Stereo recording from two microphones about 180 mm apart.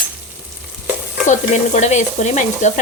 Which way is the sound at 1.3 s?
40° left (ahead or behind).